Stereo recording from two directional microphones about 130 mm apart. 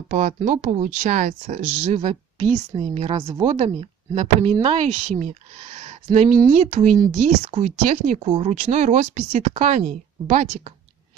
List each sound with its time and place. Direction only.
0.1 s speech: 70° right (ahead or behind)
2.8 s speech: 55° right (ahead or behind)
7.1 s speech: 85° right; by 10.4 s 70° right (ahead or behind)